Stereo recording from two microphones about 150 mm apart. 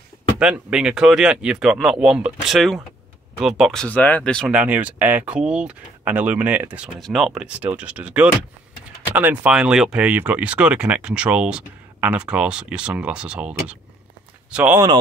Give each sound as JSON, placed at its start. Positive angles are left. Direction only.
{"t": 0.4, "sound": "speech", "side_deg": -5}
{"t": 4.5, "sound": "speech", "side_deg": -10}
{"t": 7.0, "sound": "speech", "side_deg": 0}